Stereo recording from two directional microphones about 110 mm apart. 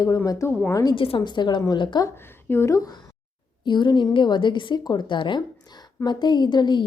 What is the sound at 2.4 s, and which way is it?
Speech, 25° left (ahead or behind).